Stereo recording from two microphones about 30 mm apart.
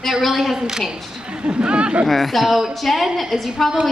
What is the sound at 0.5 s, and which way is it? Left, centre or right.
Speech, right.